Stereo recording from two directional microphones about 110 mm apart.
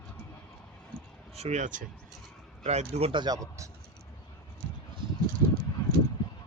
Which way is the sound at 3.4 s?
30° right (ahead or behind).